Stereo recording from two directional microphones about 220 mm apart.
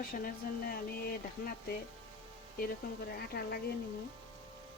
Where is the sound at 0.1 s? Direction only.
40° left (ahead or behind).